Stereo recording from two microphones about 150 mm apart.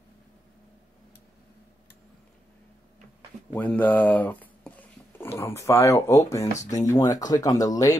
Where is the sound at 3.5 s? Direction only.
10° left (ahead or behind).